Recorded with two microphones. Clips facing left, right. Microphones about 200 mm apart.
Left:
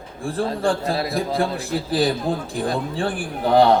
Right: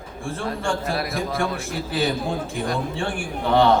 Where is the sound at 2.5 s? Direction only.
35° left (ahead or behind).